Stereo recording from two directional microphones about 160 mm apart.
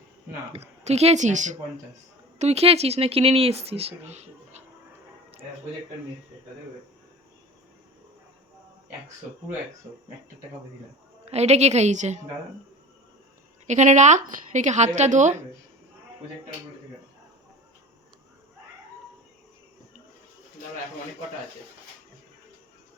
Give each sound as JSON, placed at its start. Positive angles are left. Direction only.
{"t": 0.5, "sound": "a woman's voice", "side_deg": -40}
{"t": 11.3, "sound": "a woman's voice", "side_deg": -45}
{"t": 13.7, "sound": "a woman's voice", "side_deg": -45}